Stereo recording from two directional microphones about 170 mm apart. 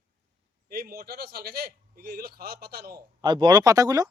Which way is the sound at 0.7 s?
65° right (ahead or behind).